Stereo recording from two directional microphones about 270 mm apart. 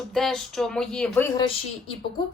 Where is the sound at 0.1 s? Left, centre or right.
Centre.